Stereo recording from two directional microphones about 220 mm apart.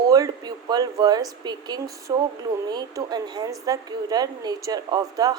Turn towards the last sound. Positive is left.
turn(degrees=-15)  # may be behind; listen again after turning